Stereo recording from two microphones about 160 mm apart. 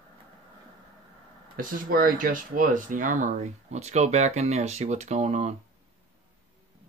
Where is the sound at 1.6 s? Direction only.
60° right (ahead or behind); by 5.5 s 45° right (ahead or behind).